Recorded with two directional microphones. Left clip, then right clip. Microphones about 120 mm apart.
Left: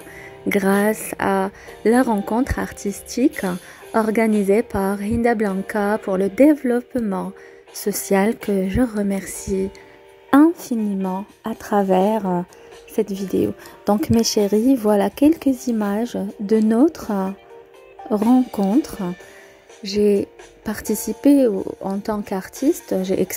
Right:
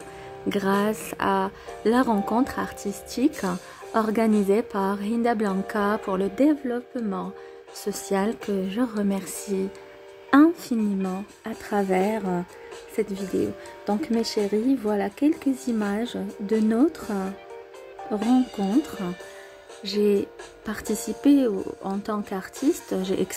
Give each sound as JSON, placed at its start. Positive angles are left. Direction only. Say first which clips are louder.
{"t": 0.5, "sound": "speech", "louder": "left 6 dB", "side_deg": 40}
{"t": 6.3, "sound": "speech", "louder": "left 9 dB", "side_deg": 45}
{"t": 9.1, "sound": "a woman's voice", "louder": "left 4 dB", "side_deg": 25}
{"t": 11.4, "sound": "speech", "louder": "left 6 dB", "side_deg": 40}
{"t": 13.0, "sound": "speech", "louder": "left 5 dB", "side_deg": 45}
{"t": 13.4, "sound": "speech", "louder": "left 7 dB", "side_deg": 65}
{"t": 15.6, "sound": "speech", "louder": "left 5 dB", "side_deg": 40}
{"t": 18.3, "sound": "speech", "louder": "left 4 dB", "side_deg": 30}
{"t": 19.8, "sound": "speech", "louder": "left 5 dB", "side_deg": 40}